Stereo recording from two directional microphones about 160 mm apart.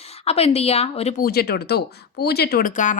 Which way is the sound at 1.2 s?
75° left (ahead or behind).